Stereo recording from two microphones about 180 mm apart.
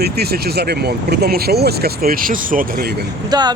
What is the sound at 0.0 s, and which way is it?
Speech, 60° right (ahead or behind).